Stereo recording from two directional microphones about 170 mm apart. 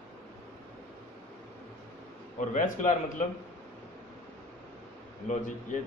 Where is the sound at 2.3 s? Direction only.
50° left (ahead or behind).